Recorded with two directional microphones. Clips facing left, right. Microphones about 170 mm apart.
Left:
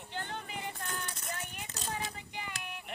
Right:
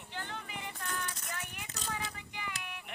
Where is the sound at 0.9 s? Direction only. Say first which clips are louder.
Even; 30° left (ahead or behind).